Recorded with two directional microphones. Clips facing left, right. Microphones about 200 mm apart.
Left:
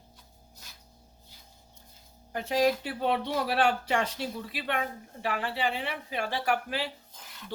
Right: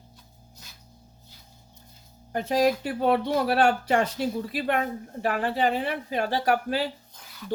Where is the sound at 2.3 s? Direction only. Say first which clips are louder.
Right 3 dB; 40° right (ahead or behind).